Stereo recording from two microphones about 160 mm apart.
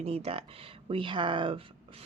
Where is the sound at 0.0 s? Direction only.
40° right (ahead or behind).